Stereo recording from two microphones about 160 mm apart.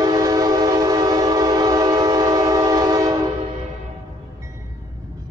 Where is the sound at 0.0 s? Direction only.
25° right (ahead or behind).